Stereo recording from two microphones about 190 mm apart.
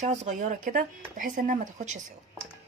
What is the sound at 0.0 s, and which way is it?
Speech, 35° right (ahead or behind).